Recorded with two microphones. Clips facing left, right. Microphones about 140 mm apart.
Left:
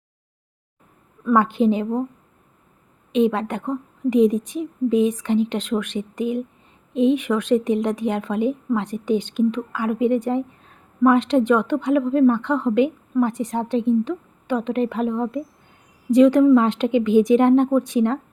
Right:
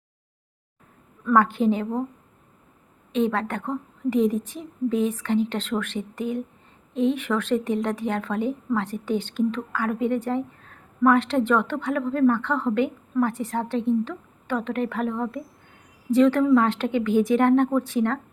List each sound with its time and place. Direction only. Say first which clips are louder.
1.2 s a woman's voice: left 2 dB; 15° left (ahead or behind)
3.1 s a woman's voice: left 4 dB; 15° left (ahead or behind)